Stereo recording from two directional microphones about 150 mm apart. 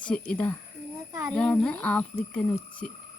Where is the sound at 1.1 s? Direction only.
20° right (ahead or behind).